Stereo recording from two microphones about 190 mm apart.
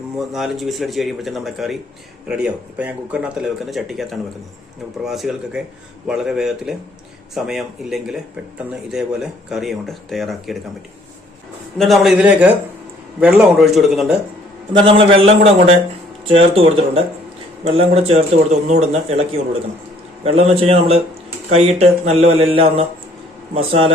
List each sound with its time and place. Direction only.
0.3 s speech: centre (ahead or behind)
11.8 s speech: centre (ahead or behind)
14.7 s a man's voice: 25° right (ahead or behind)
20.2 s a man's voice: 35° right (ahead or behind)